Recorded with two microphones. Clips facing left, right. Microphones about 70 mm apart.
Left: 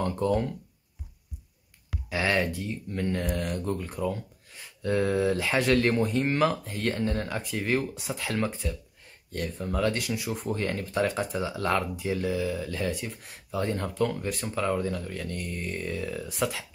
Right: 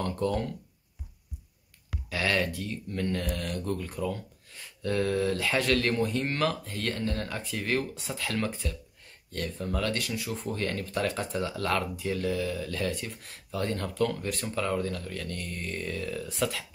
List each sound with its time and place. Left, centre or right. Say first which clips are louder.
0.0 s speech: left 3 dB; centre
2.0 s speech: left 2 dB; centre